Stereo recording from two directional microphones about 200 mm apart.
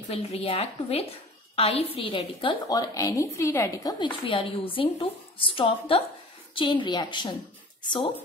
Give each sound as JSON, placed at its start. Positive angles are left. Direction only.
{"t": 0.1, "sound": "a woman's voice", "side_deg": 30}